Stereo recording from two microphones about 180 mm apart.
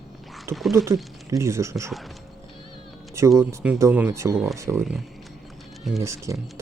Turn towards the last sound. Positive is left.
turn(degrees=-15)  # may be behind; listen again after turning